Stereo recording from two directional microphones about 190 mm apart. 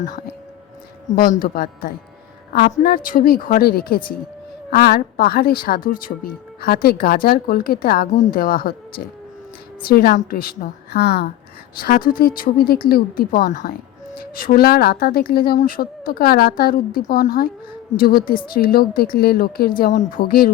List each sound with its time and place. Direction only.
0.0 s a woman's voice: 45° left (ahead or behind)
9.8 s a woman's voice: 50° left (ahead or behind)